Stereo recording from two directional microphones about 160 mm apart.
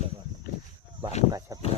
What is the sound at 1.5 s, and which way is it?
Speech, 20° right (ahead or behind).